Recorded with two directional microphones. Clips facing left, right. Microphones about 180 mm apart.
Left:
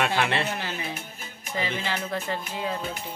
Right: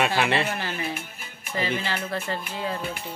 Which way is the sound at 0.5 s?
15° left (ahead or behind).